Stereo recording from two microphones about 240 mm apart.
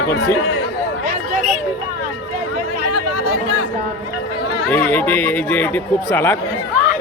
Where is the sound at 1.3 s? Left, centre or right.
Right.